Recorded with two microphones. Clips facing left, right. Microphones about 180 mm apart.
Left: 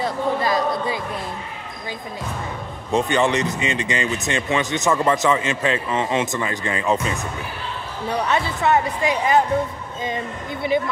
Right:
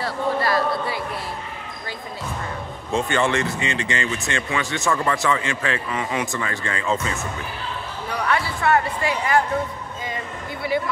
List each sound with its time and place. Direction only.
0.0 s speech: 20° left (ahead or behind)
2.9 s speech: 20° left (ahead or behind)
8.2 s speech: 20° left (ahead or behind)